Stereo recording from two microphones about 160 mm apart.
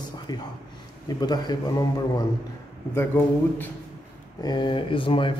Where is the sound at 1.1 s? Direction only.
25° left (ahead or behind).